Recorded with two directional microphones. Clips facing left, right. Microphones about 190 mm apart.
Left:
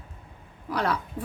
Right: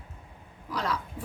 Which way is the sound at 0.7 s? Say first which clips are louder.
Left 4 dB; 60° left (ahead or behind).